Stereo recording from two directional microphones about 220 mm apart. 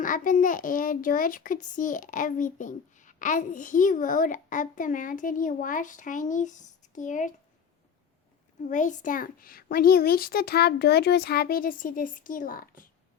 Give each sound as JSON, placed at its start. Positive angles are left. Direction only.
{"t": 0.0, "sound": "a child's voice", "side_deg": 35}
{"t": 8.6, "sound": "a child's voice", "side_deg": 35}